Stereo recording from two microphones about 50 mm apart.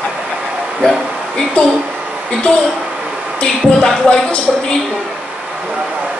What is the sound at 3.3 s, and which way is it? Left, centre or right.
Music, left.